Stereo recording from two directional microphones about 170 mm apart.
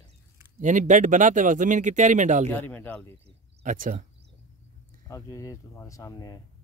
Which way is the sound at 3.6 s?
55° right (ahead or behind).